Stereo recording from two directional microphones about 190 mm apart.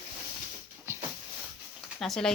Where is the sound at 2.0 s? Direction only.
Centre (ahead or behind).